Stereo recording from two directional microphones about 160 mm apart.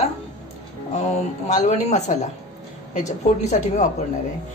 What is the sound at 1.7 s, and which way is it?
Speech, 45° left (ahead or behind).